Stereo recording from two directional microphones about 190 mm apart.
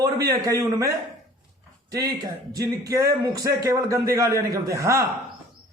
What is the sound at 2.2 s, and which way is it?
A man's voice, 20° right (ahead or behind).